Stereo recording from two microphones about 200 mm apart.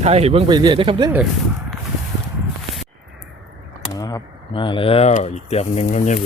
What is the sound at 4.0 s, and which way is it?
Speech, 20° left (ahead or behind).